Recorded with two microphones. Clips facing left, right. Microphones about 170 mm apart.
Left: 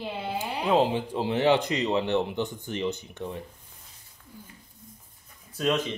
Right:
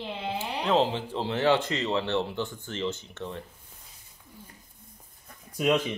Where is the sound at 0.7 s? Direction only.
15° left (ahead or behind).